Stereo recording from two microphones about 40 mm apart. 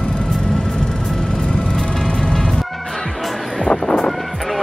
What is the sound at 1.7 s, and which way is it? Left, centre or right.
Music, centre.